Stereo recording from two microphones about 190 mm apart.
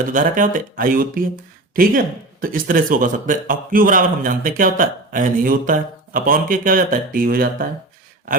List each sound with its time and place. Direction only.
0.0 s speech: 45° right (ahead or behind)